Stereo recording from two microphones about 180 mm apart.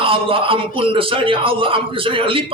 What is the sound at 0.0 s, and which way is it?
A man's voice, 30° right (ahead or behind).